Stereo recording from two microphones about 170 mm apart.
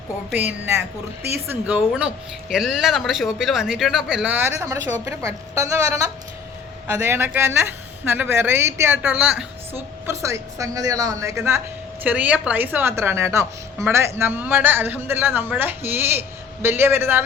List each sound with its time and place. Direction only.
0.3 s a woman's voice: 10° right (ahead or behind)
10.1 s a woman's voice: 15° right (ahead or behind)